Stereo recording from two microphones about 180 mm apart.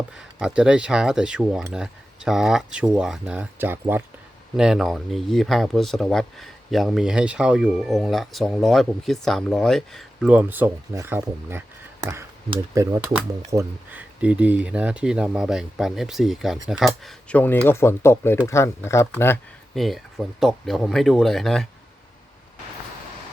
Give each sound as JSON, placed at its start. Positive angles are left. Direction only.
{"t": 0.2, "sound": "speech", "side_deg": -5}
{"t": 19.7, "sound": "speech", "side_deg": 0}